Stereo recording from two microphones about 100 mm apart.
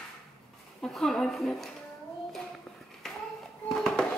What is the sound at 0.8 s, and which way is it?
Speech, 5° left (ahead or behind).